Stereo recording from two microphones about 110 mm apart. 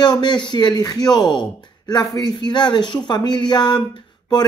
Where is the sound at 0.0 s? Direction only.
45° left (ahead or behind).